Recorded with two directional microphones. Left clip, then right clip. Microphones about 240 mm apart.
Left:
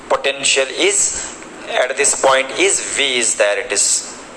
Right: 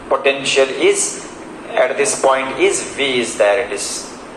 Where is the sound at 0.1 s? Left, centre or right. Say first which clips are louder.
Right 1 dB; left.